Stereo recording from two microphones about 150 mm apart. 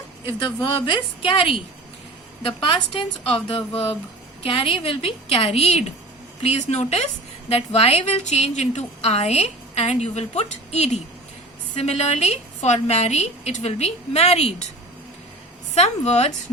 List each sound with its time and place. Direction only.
0.3 s a woman's voice: 35° left (ahead or behind)
15.7 s a woman's voice: 45° left (ahead or behind)